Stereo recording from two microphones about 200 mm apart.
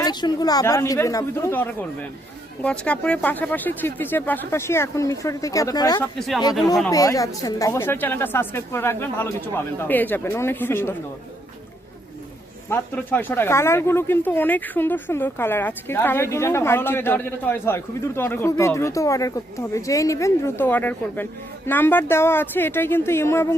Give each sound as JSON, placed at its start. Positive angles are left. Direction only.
{"t": 0.0, "sound": "speech", "side_deg": 20}
{"t": 6.1, "sound": "speech", "side_deg": 0}
{"t": 6.9, "sound": "speech", "side_deg": 15}
{"t": 12.7, "sound": "speech", "side_deg": 10}